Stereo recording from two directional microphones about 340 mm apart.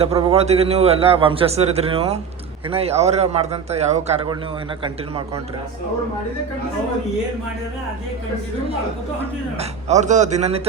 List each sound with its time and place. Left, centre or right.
0.0 s a man's voice: centre
9.6 s speech: centre